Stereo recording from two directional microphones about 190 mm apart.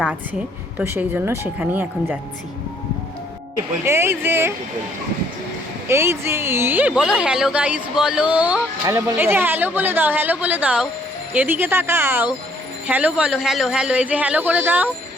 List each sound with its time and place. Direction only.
0.8 s a woman's voice: 10° right (ahead or behind)
3.8 s a woman's voice: 15° right (ahead or behind)
5.9 s a woman's voice: 15° right (ahead or behind)